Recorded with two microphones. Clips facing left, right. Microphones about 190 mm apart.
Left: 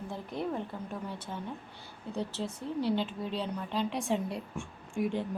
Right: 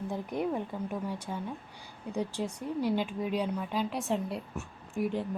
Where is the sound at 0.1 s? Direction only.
15° right (ahead or behind).